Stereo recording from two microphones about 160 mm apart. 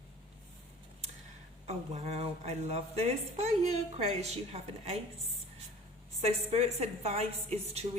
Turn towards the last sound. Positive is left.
turn(degrees=-40)  # may be behind; listen again after turning